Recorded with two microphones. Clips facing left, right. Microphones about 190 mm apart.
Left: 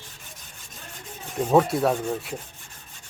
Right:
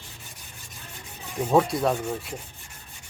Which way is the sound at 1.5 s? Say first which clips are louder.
Left 2 dB; 5° left (ahead or behind).